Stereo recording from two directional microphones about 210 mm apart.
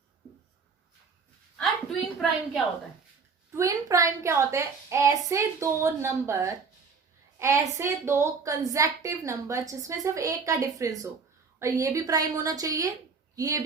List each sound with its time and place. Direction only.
1.5 s a woman's voice: centre (ahead or behind)
3.5 s a woman's voice: 15° right (ahead or behind)